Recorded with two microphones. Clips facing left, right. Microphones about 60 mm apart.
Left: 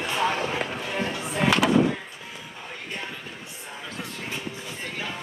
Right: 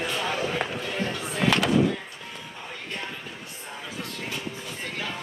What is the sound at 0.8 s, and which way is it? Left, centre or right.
Music, centre.